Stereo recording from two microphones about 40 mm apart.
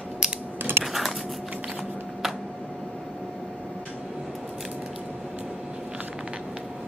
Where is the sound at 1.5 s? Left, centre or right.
Right.